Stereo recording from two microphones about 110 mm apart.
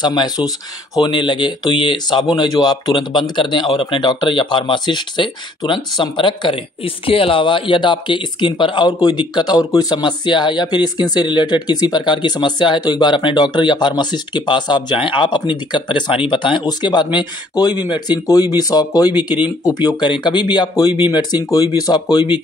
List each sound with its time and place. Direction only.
0.0 s speech: 40° left (ahead or behind)